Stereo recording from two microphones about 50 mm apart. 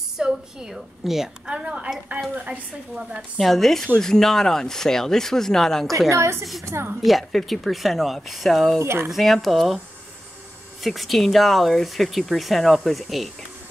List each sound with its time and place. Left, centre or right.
0.2 s a woman's voice: centre
1.4 s a woman's voice: centre
3.2 s speech: centre
5.9 s a woman's voice: right
7.0 s speech: centre
8.7 s a woman's voice: right
9.1 s speech: centre
10.8 s speech: centre